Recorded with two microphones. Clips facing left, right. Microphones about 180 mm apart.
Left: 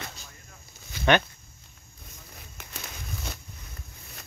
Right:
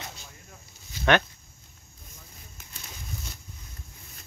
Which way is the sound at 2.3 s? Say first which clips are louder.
Left 9 dB; 70° left (ahead or behind).